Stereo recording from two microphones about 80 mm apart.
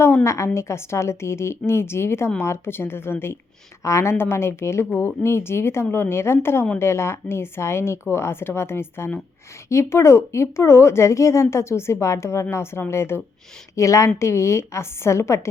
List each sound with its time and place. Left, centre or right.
0.3 s speech: left